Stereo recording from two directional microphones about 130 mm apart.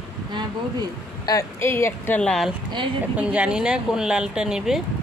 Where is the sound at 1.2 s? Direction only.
25° left (ahead or behind); by 2.5 s 5° left (ahead or behind).